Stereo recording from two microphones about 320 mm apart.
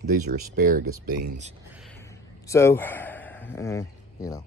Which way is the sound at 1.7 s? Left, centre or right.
Centre.